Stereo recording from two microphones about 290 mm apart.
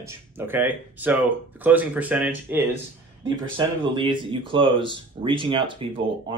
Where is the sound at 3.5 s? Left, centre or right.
Centre.